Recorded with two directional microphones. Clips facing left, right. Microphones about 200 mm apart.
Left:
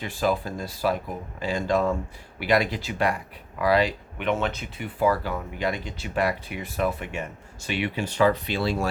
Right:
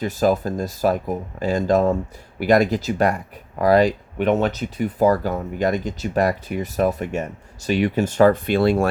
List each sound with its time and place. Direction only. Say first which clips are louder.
0.0 s speech: right 6 dB; 45° right (ahead or behind)